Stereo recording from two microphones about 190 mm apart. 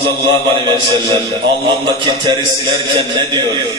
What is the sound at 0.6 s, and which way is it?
A man's voice, 25° right (ahead or behind).